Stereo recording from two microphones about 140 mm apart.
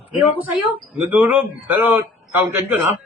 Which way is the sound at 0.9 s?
10° right (ahead or behind).